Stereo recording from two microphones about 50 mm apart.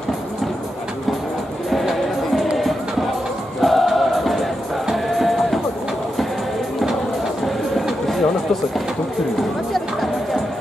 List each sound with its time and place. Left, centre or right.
3.6 s music: centre
7.4 s train: centre